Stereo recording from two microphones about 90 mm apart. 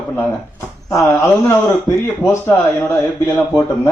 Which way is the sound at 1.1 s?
25° left (ahead or behind).